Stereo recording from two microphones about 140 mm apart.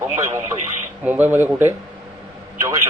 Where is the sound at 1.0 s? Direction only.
15° right (ahead or behind).